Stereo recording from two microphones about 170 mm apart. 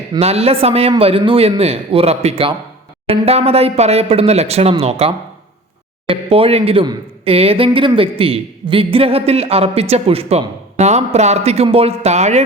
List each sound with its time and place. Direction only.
0.2 s speech: 35° right (ahead or behind)